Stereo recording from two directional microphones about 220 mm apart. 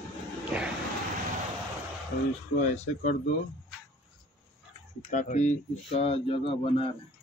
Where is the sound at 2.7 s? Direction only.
30° left (ahead or behind).